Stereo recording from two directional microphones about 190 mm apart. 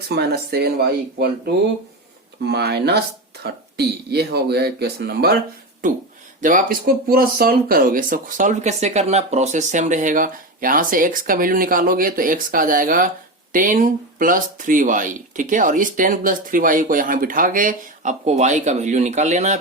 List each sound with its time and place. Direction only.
0.1 s speech: 55° right (ahead or behind)
6.4 s speech: 45° right (ahead or behind)